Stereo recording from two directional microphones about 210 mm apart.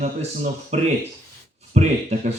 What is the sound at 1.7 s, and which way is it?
Speech, 30° right (ahead or behind).